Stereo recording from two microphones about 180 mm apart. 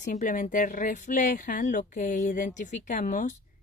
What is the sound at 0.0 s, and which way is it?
A woman's voice, 45° left (ahead or behind).